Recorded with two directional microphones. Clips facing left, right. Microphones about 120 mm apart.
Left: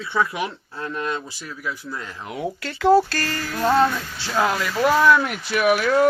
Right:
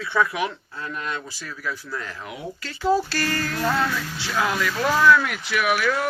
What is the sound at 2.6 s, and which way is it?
Speech, 65° left (ahead or behind).